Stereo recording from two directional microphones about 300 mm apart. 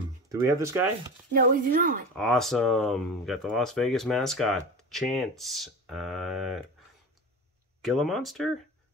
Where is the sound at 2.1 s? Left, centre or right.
Centre.